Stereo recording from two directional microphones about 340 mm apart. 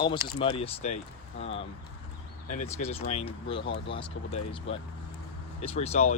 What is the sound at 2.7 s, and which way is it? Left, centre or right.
Speech, centre.